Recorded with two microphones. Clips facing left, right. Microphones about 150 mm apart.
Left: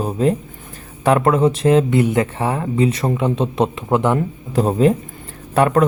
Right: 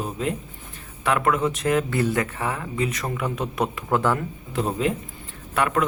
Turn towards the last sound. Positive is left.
turn(degrees=35)  # may be behind; listen again after turning